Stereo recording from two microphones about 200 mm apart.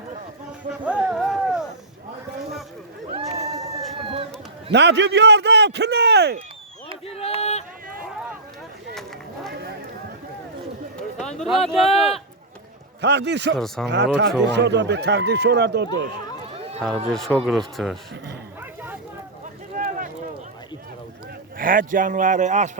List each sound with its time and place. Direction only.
0.9 s run: 5° right (ahead or behind)
3.1 s a sound: 30° right (ahead or behind)
4.0 s run: 25° right (ahead or behind)
4.7 s a man's voice: 60° right (ahead or behind)
7.1 s a sound: 30° left (ahead or behind)
8.0 s a sound: 5° right (ahead or behind)
10.9 s run: 5° left (ahead or behind)
11.6 s speech: 30° left (ahead or behind)
13.0 s speech: 60° right (ahead or behind)
17.1 s speech: centre (ahead or behind)
19.7 s a sound: 40° right (ahead or behind)
21.6 s speech: 45° right (ahead or behind)